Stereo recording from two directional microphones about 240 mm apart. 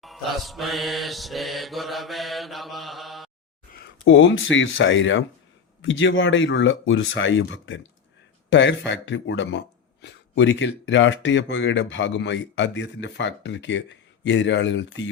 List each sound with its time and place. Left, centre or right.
0.0 s mantra: centre
3.7 s a sound: left
4.0 s speech: left